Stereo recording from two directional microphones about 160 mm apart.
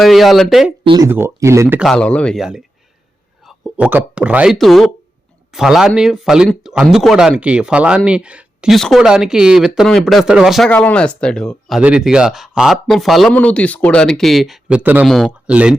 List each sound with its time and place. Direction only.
0.0 s speech: centre (ahead or behind)
1.0 s speech: 15° right (ahead or behind)
1.8 s speech: 5° left (ahead or behind)
10.7 s speech: 10° left (ahead or behind)
11.8 s speech: 5° right (ahead or behind)
15.0 s speech: centre (ahead or behind)
15.3 s speech: 10° right (ahead or behind)